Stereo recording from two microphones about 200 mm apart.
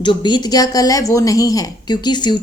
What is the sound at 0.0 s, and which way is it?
A woman's voice, 25° left (ahead or behind).